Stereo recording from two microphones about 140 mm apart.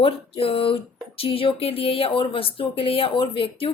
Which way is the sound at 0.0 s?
40° left (ahead or behind).